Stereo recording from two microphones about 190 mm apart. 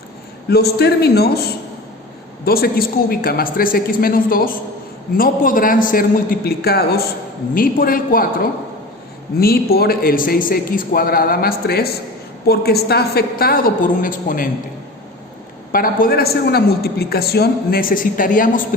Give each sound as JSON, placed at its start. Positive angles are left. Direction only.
{"t": 0.5, "sound": "a man's voice", "side_deg": 60}
{"t": 9.4, "sound": "a woman's voice", "side_deg": 55}
{"t": 15.7, "sound": "a woman's voice", "side_deg": 50}